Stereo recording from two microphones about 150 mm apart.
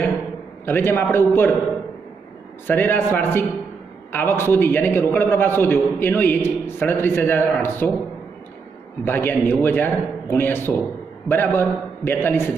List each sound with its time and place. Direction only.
0.7 s a man's voice: 15° left (ahead or behind)
2.6 s a man's voice: 10° left (ahead or behind)
9.0 s a man's voice: 15° left (ahead or behind)